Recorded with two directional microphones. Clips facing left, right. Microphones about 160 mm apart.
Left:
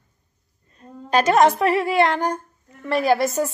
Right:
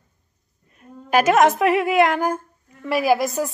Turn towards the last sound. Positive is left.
turn(degrees=0)  # may be behind; listen again after turning